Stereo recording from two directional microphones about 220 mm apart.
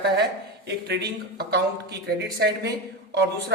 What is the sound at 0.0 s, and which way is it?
Speech, 50° right (ahead or behind).